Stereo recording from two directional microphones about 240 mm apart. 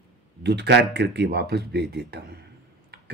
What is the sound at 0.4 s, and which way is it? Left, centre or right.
A man's voice, right.